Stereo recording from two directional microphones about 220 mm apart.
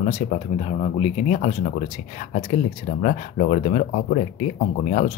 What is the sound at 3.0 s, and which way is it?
Speech, 35° left (ahead or behind).